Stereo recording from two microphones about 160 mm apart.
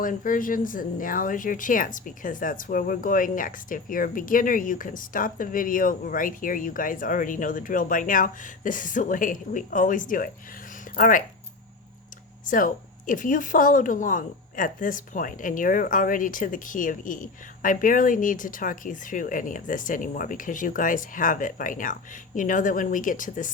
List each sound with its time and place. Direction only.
0.0 s speech: 55° left (ahead or behind)
12.5 s speech: 55° left (ahead or behind)